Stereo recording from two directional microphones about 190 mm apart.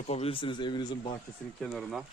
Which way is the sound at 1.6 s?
Centre (ahead or behind).